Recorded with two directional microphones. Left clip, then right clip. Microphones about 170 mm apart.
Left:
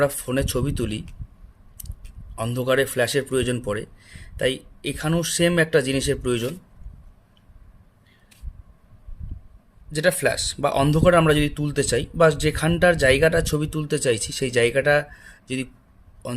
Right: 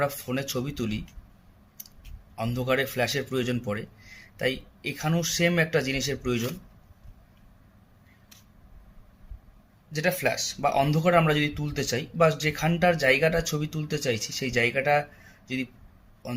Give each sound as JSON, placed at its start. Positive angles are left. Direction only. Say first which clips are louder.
{"t": 0.0, "sound": "speech", "louder": "left 6 dB", "side_deg": 50}
{"t": 2.3, "sound": "speech", "louder": "left 5 dB", "side_deg": 45}
{"t": 9.9, "sound": "speech", "louder": "left 5 dB", "side_deg": 50}